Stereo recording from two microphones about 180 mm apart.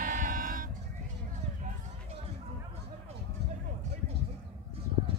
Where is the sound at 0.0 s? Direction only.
50° right (ahead or behind).